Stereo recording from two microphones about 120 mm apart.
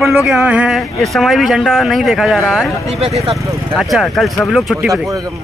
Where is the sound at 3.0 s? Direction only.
60° right (ahead or behind).